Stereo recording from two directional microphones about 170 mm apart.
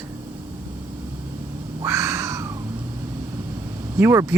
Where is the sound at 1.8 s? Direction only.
15° right (ahead or behind).